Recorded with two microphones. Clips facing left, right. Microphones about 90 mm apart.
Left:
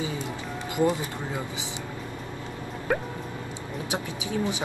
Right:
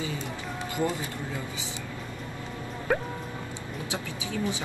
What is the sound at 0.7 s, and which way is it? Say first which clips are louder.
Speech: left 5 dB; 20° left (ahead or behind).